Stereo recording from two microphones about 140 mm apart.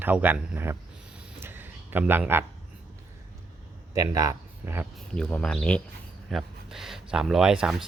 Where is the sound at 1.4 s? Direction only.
15° right (ahead or behind).